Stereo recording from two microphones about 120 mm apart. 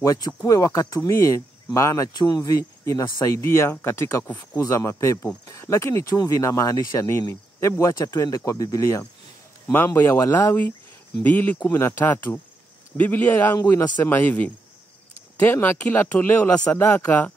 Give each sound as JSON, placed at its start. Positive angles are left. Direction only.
{"t": 0.0, "sound": "speech", "side_deg": 30}
{"t": 9.7, "sound": "speech", "side_deg": 15}